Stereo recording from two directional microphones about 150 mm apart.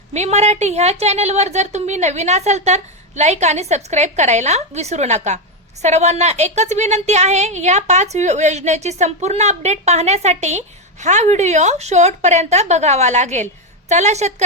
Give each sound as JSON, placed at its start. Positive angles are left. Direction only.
{"t": 0.1, "sound": "a woman's voice", "side_deg": -50}